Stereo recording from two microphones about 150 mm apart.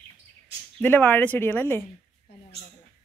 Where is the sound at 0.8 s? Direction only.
10° left (ahead or behind).